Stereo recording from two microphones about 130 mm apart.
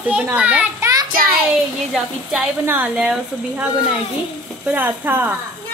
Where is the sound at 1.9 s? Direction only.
5° right (ahead or behind).